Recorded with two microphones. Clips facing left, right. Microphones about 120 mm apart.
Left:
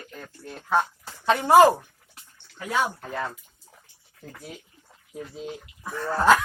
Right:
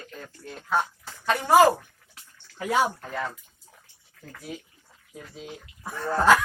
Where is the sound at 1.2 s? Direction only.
25° left (ahead or behind).